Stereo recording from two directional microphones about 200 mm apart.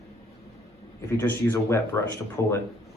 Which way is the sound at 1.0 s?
10° left (ahead or behind).